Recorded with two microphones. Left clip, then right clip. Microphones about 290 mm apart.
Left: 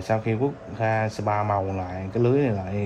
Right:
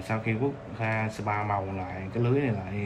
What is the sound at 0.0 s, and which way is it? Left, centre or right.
Speech, left.